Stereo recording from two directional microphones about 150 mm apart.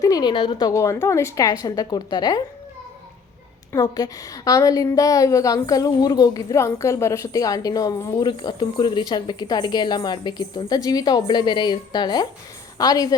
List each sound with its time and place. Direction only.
0.0 s a woman's voice: 25° left (ahead or behind)
0.7 s a woman's voice: 20° left (ahead or behind)
3.7 s a woman's voice: 25° left (ahead or behind)